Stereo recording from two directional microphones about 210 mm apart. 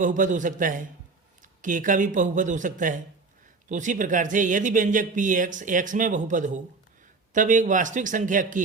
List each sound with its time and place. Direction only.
0.0 s speech: 40° right (ahead or behind)